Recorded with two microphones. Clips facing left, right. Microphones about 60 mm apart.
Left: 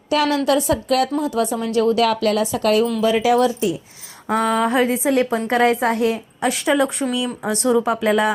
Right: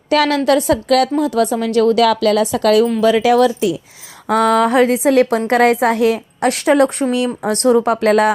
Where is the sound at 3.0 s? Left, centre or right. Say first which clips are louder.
Right 4 dB; right.